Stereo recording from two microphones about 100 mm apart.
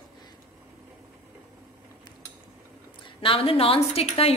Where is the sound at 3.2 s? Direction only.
65° left (ahead or behind).